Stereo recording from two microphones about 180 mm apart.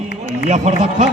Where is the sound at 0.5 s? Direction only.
40° right (ahead or behind).